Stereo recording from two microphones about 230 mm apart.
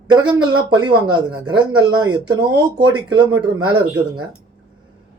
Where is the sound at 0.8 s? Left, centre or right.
Centre.